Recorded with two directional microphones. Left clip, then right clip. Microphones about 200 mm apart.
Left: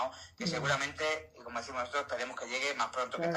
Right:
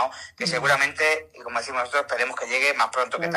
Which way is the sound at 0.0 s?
25° right (ahead or behind).